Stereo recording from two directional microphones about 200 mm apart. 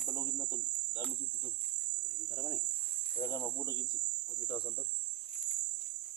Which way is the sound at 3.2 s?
20° left (ahead or behind).